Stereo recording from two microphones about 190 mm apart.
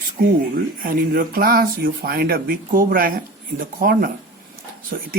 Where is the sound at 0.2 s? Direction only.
50° right (ahead or behind).